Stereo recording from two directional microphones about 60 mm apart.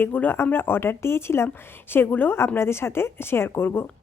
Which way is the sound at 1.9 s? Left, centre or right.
Left.